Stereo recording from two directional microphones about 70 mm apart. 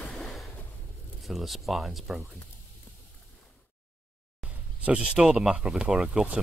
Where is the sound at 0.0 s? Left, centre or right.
Centre.